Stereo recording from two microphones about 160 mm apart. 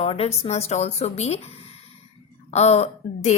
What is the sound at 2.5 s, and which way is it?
Speech, 40° left (ahead or behind).